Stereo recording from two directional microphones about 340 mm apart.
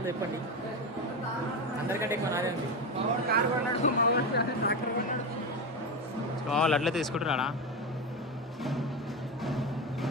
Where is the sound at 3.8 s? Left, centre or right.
Left.